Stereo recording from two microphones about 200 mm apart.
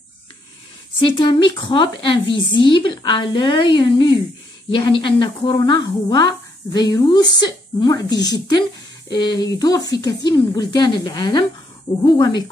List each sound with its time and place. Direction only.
1.0 s a woman's voice: 25° left (ahead or behind)